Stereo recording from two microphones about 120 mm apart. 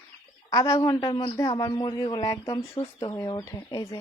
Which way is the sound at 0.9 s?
40° left (ahead or behind).